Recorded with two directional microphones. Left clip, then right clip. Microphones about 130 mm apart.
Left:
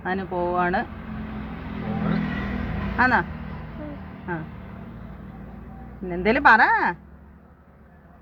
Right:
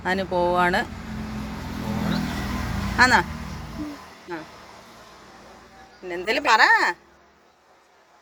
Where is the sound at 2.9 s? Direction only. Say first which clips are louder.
Right 3 dB; 15° right (ahead or behind).